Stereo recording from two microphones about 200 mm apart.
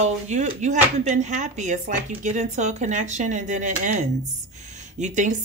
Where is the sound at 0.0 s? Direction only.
35° right (ahead or behind).